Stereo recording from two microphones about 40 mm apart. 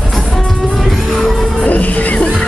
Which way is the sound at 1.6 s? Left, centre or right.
Left.